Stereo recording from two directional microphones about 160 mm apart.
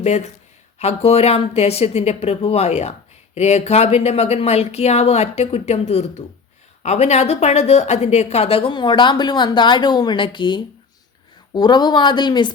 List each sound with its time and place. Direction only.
0.0 s a woman's voice: 45° left (ahead or behind); by 12.5 s 30° left (ahead or behind)